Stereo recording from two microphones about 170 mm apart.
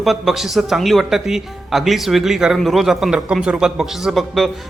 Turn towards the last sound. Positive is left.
turn(degrees=0)  # may be behind; listen again after turning